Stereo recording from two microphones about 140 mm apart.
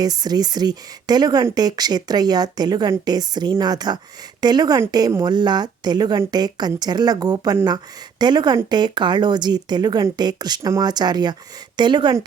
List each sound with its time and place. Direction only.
0.0 s speech: 30° right (ahead or behind)